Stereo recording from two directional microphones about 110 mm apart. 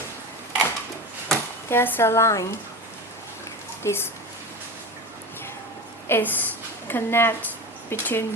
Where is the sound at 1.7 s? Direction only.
20° left (ahead or behind).